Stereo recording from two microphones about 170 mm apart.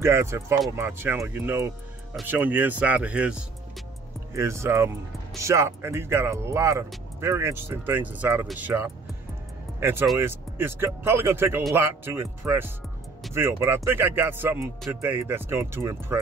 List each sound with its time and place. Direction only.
0.0 s speech: 15° right (ahead or behind)
4.3 s speech: 15° right (ahead or behind)